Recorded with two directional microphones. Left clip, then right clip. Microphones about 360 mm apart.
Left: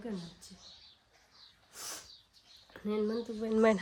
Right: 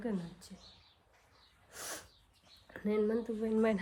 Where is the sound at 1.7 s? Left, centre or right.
Centre.